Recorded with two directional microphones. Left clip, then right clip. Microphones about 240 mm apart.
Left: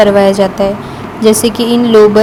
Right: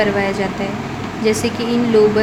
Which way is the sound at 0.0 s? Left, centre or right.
Left.